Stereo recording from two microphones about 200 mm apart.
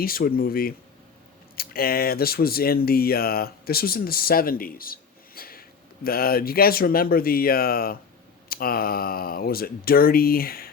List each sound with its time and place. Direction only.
0.0 s speech: 50° left (ahead or behind)